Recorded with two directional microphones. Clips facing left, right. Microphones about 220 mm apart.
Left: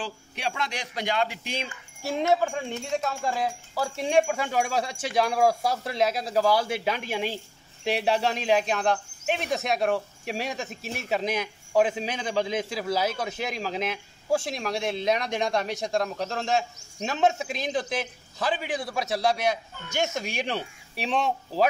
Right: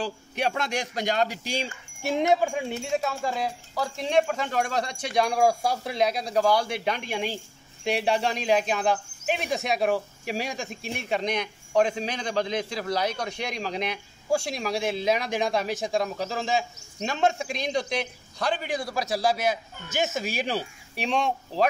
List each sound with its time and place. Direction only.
0.0 s a man's voice: 45° right (ahead or behind)
2.0 s speech: 15° right (ahead or behind); by 21.6 s centre (ahead or behind)